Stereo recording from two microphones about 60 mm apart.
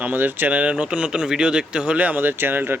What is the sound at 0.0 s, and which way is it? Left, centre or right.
Speech, right.